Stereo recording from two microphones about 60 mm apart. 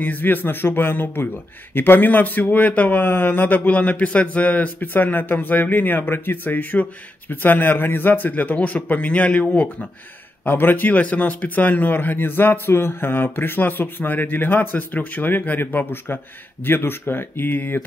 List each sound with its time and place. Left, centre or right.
0.0 s speech: left
10.4 s speech: left